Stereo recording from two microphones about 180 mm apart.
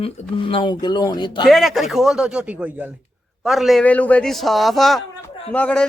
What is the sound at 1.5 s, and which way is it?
A man's voice, centre (ahead or behind).